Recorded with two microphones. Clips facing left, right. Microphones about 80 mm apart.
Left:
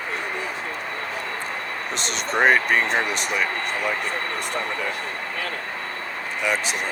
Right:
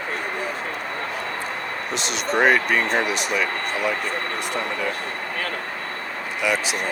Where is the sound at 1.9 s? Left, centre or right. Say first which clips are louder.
Right 2 dB; left.